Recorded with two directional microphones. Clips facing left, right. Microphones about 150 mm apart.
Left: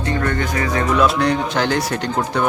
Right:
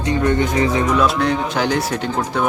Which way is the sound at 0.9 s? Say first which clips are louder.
Left 1 dB; centre (ahead or behind).